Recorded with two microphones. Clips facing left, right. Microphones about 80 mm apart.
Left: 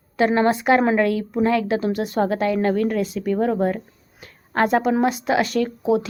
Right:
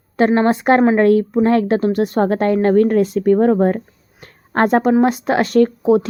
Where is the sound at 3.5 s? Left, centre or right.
Right.